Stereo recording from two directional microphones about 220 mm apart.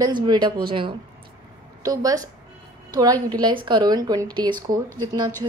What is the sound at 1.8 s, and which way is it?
Speech, 15° right (ahead or behind).